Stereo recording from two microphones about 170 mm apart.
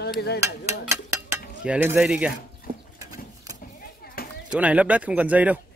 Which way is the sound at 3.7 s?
60° left (ahead or behind).